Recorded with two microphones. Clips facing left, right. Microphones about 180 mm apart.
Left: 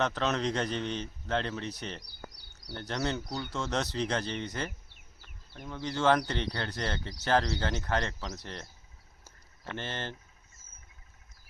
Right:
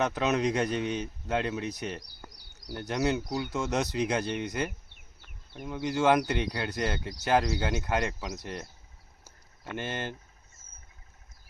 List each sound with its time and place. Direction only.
0.0 s speech: 10° right (ahead or behind)
2.3 s a sound: 90° right
2.7 s speech: 10° right (ahead or behind)
9.7 s speech: 10° right (ahead or behind)